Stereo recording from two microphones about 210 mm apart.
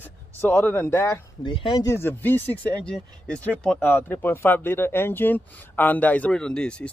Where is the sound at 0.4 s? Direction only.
10° left (ahead or behind).